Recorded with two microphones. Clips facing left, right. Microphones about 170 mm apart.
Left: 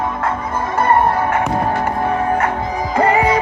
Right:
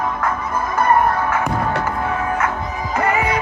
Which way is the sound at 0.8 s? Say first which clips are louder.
Left 2 dB; 30° left (ahead or behind).